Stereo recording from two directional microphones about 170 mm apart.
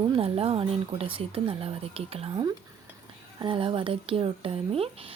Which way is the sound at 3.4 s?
30° right (ahead or behind).